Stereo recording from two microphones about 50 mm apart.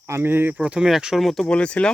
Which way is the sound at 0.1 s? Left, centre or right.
Right.